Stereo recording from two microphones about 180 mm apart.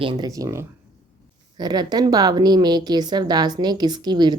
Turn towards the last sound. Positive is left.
turn(degrees=-25)  # may be behind; listen again after turning